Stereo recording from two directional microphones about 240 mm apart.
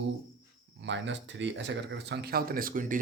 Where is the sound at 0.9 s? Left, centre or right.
Right.